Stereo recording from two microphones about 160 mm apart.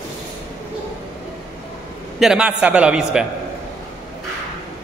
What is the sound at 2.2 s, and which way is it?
A man's voice, 5° right (ahead or behind).